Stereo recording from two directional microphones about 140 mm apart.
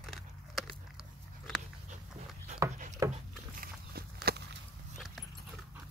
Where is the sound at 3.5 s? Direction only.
90° right.